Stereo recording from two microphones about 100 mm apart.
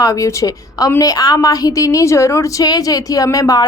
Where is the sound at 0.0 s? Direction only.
35° left (ahead or behind).